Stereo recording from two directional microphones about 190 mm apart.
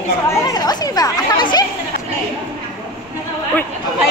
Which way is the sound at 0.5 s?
20° left (ahead or behind).